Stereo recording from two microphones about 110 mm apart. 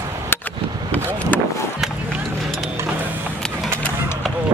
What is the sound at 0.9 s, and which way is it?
Vehicle, 15° left (ahead or behind).